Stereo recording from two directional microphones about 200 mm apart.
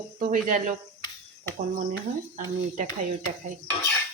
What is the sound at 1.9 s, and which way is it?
Speech, 40° right (ahead or behind).